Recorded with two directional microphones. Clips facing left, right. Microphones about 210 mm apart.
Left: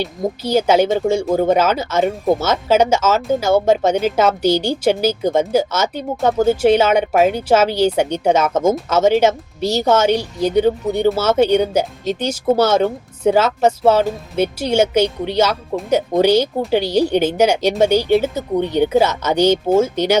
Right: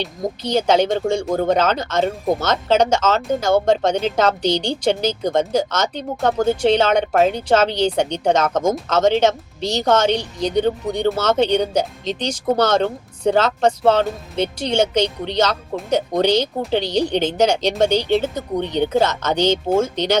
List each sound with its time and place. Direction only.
0.0 s speech: 5° left (ahead or behind)